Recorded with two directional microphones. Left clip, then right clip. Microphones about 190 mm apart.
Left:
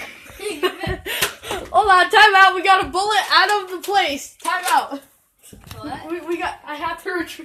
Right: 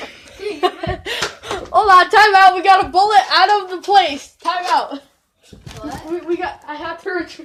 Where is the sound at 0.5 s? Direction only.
10° left (ahead or behind).